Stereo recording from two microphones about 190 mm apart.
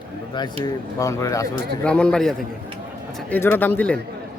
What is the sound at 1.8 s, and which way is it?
Speech, 5° left (ahead or behind).